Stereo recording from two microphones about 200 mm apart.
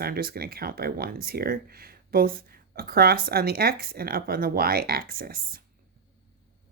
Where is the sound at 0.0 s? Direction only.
50° right (ahead or behind).